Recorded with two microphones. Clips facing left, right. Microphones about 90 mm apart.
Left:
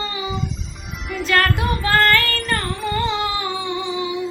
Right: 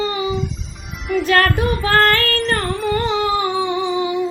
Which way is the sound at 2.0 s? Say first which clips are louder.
Right 2 dB; 40° right (ahead or behind).